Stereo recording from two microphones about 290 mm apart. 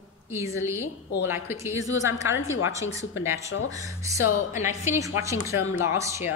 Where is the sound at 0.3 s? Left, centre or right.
Centre.